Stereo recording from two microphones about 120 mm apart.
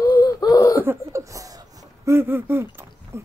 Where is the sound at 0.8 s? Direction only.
20° right (ahead or behind).